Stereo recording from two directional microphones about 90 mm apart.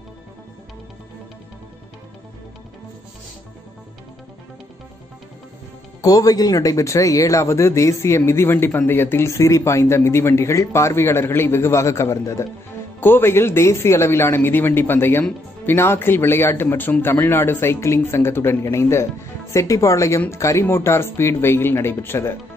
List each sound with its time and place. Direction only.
5.9 s speech: 40° left (ahead or behind); by 22.4 s 25° left (ahead or behind)